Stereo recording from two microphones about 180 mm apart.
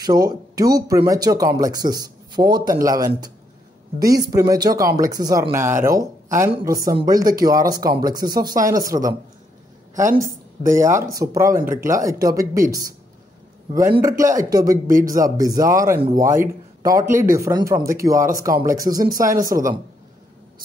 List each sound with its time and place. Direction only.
0.0 s speech: 20° right (ahead or behind)
10.0 s a woman's voice: 45° right (ahead or behind)
10.6 s speech: 15° right (ahead or behind)
14.0 s speech: 20° right (ahead or behind)